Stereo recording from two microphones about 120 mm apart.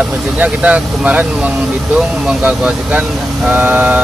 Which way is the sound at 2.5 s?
10° right (ahead or behind).